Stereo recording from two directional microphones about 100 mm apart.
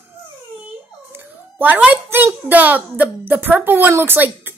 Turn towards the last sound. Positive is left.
turn(degrees=-20)  # may be behind; listen again after turning